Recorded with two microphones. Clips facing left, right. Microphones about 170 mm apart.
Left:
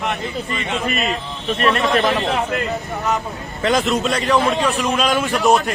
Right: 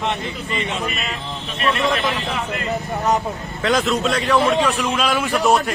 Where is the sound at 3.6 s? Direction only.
Centre (ahead or behind).